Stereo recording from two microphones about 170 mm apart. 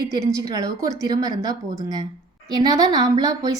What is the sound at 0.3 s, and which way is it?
A woman's voice, 20° right (ahead or behind).